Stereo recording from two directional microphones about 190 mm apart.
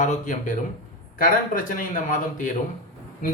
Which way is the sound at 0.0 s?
40° left (ahead or behind).